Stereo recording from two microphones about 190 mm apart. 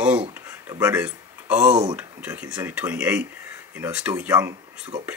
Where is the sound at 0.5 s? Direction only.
15° right (ahead or behind).